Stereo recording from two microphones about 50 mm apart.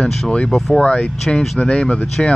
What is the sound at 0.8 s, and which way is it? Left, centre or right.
Speech, centre.